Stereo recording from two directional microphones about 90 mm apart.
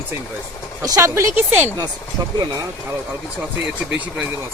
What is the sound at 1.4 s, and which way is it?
Speech, 20° right (ahead or behind).